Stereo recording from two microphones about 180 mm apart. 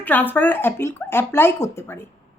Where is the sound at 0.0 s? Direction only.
10° left (ahead or behind).